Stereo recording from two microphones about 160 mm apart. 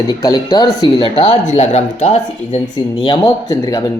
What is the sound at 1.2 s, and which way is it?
Speech, 45° left (ahead or behind).